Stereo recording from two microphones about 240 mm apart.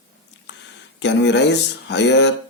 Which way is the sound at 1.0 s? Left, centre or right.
Left.